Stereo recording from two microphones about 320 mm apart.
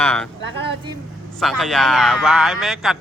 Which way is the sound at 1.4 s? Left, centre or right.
Centre.